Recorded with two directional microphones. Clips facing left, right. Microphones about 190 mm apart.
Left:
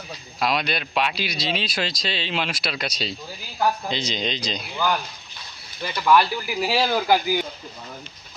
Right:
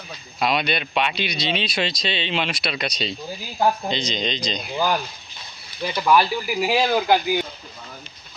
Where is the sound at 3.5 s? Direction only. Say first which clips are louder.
Right 2 dB; 25° right (ahead or behind).